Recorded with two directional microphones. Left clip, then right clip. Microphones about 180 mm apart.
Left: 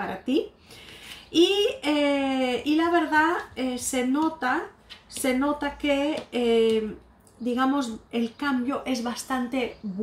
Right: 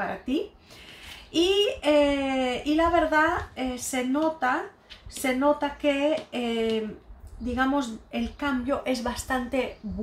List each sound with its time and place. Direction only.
1.3 s a woman's voice: 15° right (ahead or behind)